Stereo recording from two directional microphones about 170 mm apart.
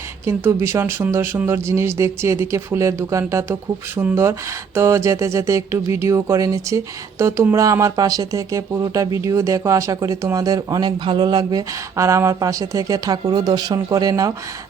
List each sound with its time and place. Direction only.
0.3 s speech: 15° right (ahead or behind)